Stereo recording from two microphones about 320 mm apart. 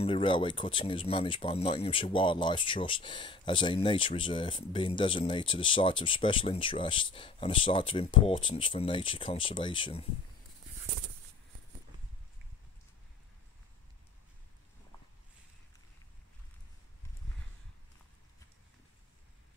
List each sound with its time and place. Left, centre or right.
0.0 s speech: centre